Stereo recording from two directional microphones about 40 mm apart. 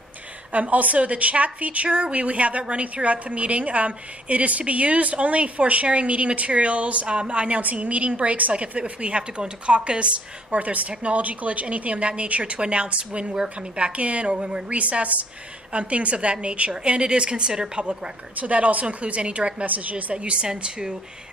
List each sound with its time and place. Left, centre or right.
0.5 s a woman's voice: right
18.3 s a woman's voice: right
19.6 s a woman's voice: right
20.2 s a woman's voice: right